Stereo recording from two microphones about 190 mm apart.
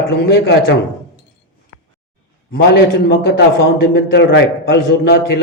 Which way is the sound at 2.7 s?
55° left (ahead or behind).